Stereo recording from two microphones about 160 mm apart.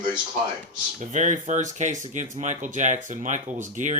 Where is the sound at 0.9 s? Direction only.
50° right (ahead or behind).